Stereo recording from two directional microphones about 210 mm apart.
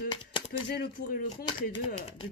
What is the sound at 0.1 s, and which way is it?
Typewriter, 25° left (ahead or behind).